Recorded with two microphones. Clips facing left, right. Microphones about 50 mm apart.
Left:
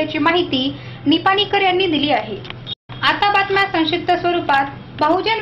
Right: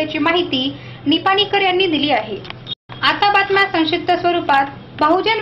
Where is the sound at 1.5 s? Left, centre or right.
Centre.